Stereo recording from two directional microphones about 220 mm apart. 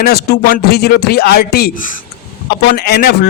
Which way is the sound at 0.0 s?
45° left (ahead or behind).